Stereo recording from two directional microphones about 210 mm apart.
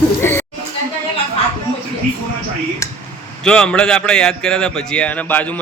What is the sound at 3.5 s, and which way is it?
A man's voice, 5° left (ahead or behind).